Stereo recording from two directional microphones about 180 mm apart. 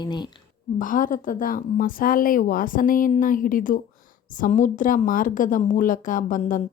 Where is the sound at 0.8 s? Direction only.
50° left (ahead or behind).